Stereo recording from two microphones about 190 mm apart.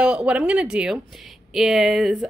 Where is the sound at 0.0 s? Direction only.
5° right (ahead or behind).